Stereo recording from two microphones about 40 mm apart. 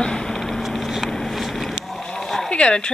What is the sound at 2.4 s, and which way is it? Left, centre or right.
Speech, left.